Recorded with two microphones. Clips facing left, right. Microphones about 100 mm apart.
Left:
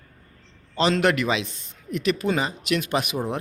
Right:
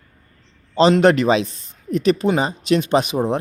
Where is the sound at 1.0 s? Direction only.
35° right (ahead or behind).